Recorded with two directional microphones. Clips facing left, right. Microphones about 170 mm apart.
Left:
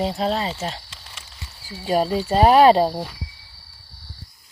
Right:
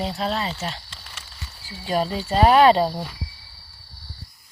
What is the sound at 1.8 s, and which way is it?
Speech, 40° left (ahead or behind).